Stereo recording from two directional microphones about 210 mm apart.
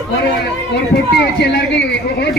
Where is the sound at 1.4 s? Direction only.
50° left (ahead or behind).